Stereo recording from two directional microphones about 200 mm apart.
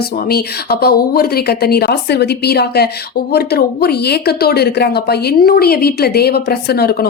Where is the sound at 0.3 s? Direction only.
50° left (ahead or behind).